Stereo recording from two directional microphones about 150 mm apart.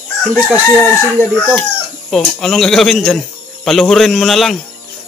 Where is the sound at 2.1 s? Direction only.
5° left (ahead or behind).